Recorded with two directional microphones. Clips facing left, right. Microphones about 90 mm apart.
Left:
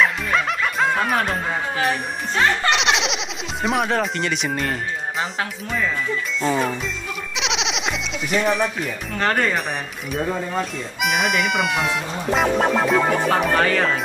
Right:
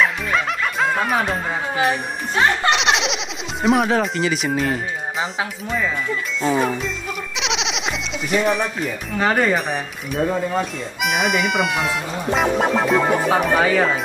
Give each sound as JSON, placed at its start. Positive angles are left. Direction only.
{"t": 0.0, "sound": "music", "side_deg": 0}
{"t": 2.3, "sound": "speech", "side_deg": -20}
{"t": 2.7, "sound": "speech", "side_deg": 0}